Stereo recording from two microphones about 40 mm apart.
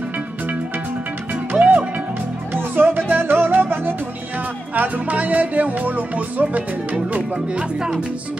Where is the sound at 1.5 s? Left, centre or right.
Right.